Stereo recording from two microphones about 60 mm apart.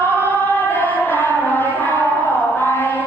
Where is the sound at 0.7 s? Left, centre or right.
Left.